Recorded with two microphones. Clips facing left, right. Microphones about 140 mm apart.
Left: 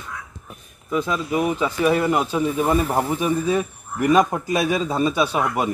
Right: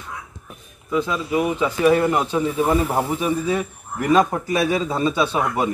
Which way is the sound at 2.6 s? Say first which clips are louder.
Right 1 dB; 10° right (ahead or behind).